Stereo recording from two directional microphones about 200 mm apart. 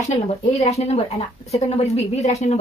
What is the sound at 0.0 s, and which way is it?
Speech, 35° left (ahead or behind).